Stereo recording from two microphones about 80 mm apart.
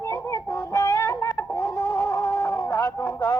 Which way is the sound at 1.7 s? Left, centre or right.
Left.